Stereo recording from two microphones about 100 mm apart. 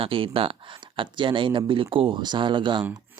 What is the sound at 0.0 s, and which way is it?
Speech, 65° right (ahead or behind).